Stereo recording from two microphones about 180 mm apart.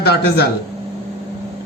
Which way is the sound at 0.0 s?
65° left (ahead or behind).